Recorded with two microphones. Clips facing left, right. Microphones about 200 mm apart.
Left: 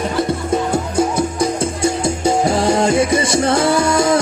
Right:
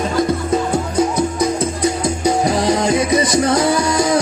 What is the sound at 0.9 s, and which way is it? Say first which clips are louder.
Music: right 1 dB; 30° left (ahead or behind).